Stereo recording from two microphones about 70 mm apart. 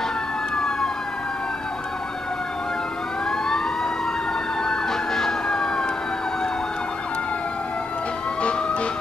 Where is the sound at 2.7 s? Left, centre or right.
Centre.